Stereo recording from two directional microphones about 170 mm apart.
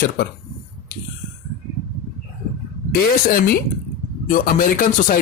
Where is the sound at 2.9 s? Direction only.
60° left (ahead or behind).